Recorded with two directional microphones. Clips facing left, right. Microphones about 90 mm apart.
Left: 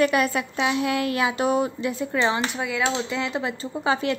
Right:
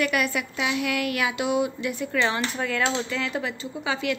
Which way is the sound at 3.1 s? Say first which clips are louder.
Left 2 dB; 20° left (ahead or behind).